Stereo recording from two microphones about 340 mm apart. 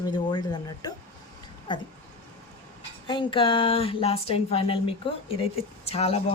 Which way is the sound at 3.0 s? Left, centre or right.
Centre.